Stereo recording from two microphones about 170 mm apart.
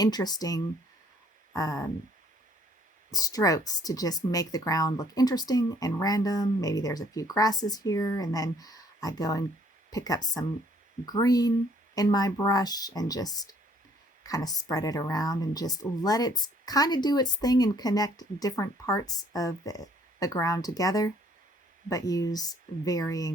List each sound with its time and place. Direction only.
0.0 s a woman's voice: 25° left (ahead or behind)
3.1 s a woman's voice: 20° left (ahead or behind)